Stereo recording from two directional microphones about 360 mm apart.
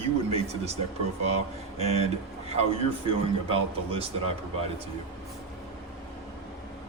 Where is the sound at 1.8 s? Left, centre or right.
Centre.